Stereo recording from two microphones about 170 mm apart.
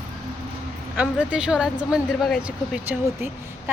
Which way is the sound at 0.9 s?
5° right (ahead or behind).